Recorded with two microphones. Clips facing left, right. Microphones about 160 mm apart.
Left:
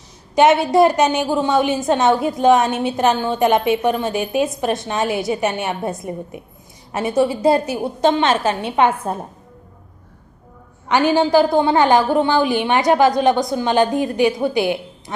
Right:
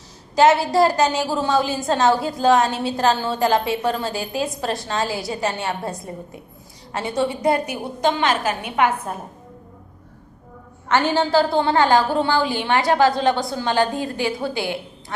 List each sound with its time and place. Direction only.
0.3 s a woman's voice: 20° left (ahead or behind)
10.8 s a woman's voice: 15° left (ahead or behind)